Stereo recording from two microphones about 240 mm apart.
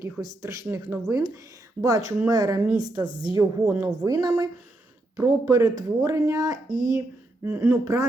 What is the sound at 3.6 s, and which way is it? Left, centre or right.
Speech, centre.